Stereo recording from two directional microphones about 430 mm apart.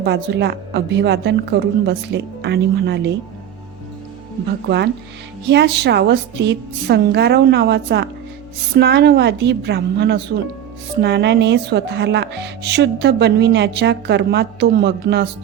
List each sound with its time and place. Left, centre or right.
0.0 s a woman's voice: right
5.5 s a woman's voice: right